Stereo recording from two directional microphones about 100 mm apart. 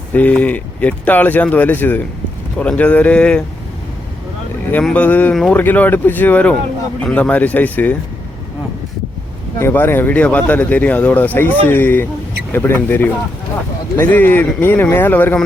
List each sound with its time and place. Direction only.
0.1 s speech: 15° left (ahead or behind)
4.8 s speech: 10° left (ahead or behind)
5.3 s speech: 5° left (ahead or behind)
5.5 s speech: 20° left (ahead or behind)
9.6 s speech: 25° left (ahead or behind)